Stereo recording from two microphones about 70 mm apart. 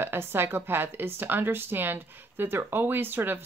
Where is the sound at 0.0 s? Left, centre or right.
Right.